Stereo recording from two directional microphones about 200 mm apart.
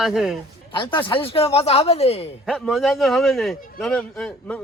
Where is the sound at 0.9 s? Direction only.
25° left (ahead or behind).